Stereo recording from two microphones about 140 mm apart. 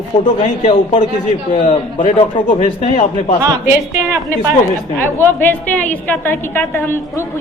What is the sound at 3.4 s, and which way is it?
Speech, 20° right (ahead or behind).